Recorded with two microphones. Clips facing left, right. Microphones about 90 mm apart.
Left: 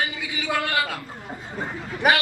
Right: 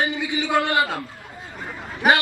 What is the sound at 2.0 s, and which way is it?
Speech, centre (ahead or behind).